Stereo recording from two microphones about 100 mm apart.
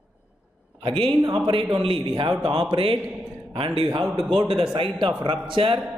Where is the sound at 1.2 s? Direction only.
45° right (ahead or behind); by 2.9 s 65° right (ahead or behind).